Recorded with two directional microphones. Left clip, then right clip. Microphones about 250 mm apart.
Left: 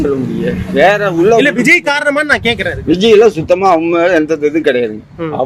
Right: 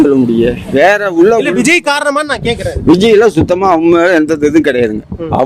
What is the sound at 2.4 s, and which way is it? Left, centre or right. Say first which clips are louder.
Speech: left 1 dB; centre.